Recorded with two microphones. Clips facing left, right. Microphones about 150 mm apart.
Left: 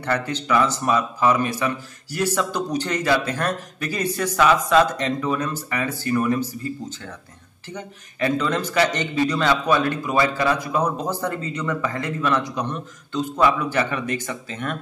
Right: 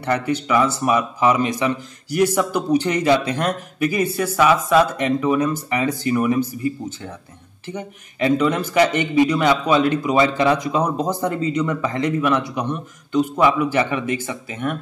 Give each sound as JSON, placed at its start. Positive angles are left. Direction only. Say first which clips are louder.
{"t": 0.0, "sound": "a man's voice", "louder": "right 4 dB", "side_deg": -10}